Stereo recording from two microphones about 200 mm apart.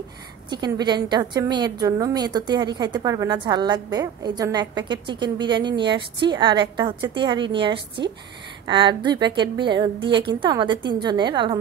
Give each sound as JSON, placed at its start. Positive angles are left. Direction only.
{"t": 0.5, "sound": "a woman's voice", "side_deg": -20}